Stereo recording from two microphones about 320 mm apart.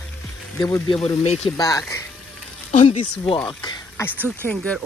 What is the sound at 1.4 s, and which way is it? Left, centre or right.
Speech, centre.